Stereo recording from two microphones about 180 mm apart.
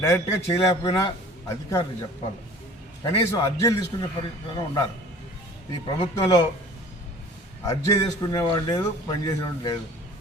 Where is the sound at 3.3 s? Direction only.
15° left (ahead or behind).